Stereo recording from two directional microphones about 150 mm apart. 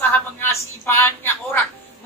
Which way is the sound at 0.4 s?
15° left (ahead or behind).